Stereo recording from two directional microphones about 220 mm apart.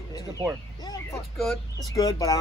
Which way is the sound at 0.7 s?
15° left (ahead or behind).